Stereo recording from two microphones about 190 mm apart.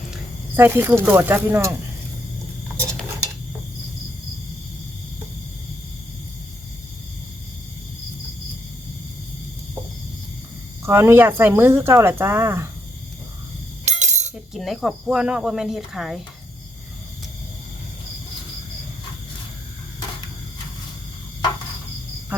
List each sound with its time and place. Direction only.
0.5 s speech: 10° right (ahead or behind)
2.7 s dishes: 5° left (ahead or behind)
10.8 s speech: 15° right (ahead or behind)
13.8 s a sound: 40° right (ahead or behind)
14.5 s speech: centre (ahead or behind)